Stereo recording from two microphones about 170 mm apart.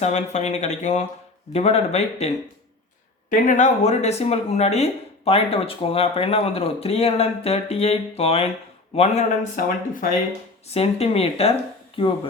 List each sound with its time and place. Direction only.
0.0 s speech: 40° left (ahead or behind)
9.6 s speech: 55° left (ahead or behind)
10.7 s speech: 35° left (ahead or behind)